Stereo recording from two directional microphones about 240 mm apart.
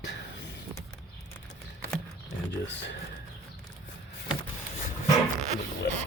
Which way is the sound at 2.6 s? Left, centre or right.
Left.